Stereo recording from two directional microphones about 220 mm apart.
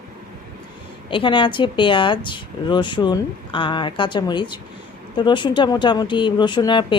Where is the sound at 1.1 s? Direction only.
20° left (ahead or behind).